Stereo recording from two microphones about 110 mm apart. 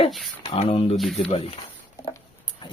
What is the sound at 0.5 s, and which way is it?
Speech, 65° left (ahead or behind).